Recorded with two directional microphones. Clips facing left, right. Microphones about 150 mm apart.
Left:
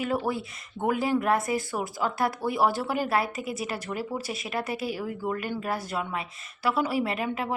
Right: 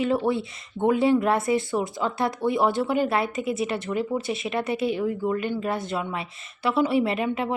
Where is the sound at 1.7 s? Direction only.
5° left (ahead or behind).